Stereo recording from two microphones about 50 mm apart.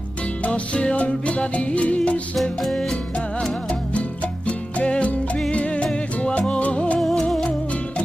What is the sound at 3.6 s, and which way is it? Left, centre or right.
Music, left.